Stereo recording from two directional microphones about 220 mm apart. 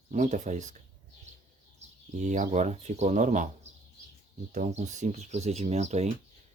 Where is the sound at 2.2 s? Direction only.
35° right (ahead or behind).